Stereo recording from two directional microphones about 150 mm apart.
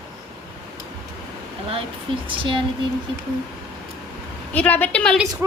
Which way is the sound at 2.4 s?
35° right (ahead or behind).